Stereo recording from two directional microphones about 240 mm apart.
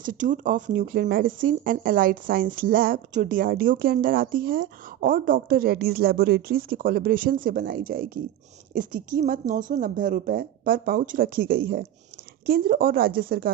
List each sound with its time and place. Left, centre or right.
0.0 s speech: right